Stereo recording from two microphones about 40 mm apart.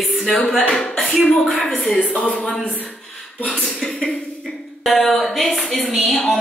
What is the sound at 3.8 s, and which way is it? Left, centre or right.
A woman's voice, centre.